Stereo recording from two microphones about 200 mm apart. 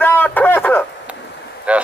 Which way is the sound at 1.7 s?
5° right (ahead or behind).